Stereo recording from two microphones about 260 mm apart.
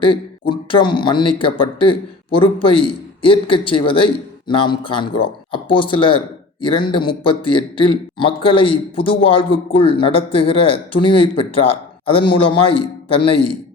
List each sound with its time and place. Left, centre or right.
0.0 s a man's voice: centre